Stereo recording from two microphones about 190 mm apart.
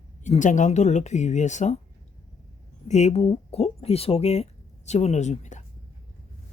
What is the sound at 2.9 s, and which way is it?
Speech, 35° left (ahead or behind).